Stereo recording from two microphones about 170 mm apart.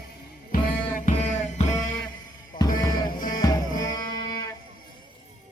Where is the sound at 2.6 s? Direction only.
25° left (ahead or behind).